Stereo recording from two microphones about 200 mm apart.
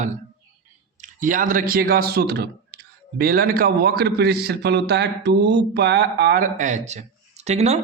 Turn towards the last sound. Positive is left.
turn(degrees=-30)  # may be behind; listen again after turning